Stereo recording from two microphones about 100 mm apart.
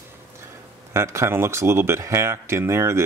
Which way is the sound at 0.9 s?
25° right (ahead or behind).